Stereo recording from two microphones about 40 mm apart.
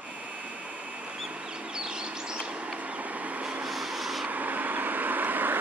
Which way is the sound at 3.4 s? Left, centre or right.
Right.